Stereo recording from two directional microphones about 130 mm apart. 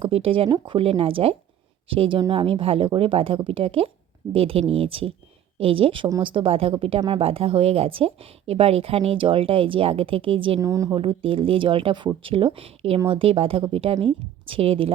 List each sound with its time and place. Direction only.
0.0 s speech: 45° right (ahead or behind)
10.6 s a woman's voice: 25° right (ahead or behind)
10.9 s speech: 45° right (ahead or behind)